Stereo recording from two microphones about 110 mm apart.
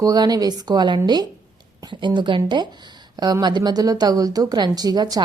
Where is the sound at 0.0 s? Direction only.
35° right (ahead or behind).